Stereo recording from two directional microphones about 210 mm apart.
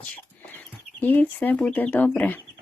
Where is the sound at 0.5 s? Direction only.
10° left (ahead or behind).